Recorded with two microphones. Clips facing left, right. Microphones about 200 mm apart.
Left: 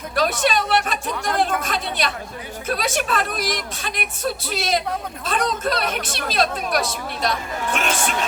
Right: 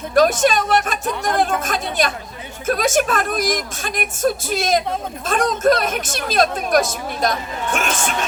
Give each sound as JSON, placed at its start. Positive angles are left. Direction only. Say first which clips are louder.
{"t": 0.1, "sound": "speech", "louder": "right 6 dB", "side_deg": -45}